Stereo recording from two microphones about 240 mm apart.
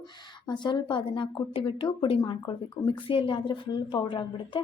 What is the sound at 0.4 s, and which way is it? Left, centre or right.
A woman's voice, centre.